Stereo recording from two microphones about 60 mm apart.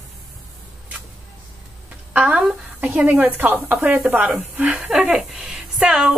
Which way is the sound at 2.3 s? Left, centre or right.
Centre.